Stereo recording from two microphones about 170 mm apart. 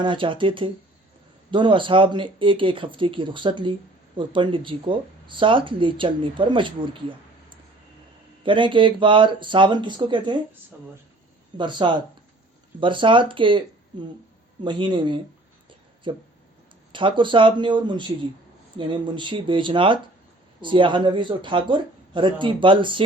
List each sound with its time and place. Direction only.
0.0 s speech: 30° right (ahead or behind)
11.5 s speech: 25° right (ahead or behind)
14.6 s speech: 25° right (ahead or behind)